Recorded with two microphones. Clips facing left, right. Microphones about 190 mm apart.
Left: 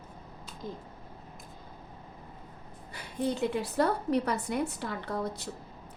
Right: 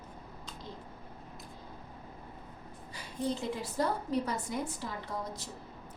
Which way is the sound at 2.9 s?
60° left (ahead or behind).